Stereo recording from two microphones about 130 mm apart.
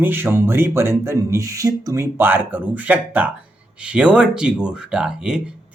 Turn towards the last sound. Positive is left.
turn(degrees=-5)  # may be behind; listen again after turning